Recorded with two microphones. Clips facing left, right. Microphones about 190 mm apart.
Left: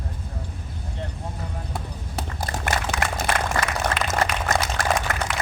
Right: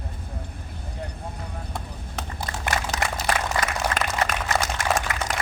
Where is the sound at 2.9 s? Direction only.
40° right (ahead or behind).